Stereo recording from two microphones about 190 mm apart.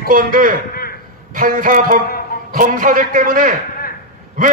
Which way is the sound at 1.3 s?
45° right (ahead or behind).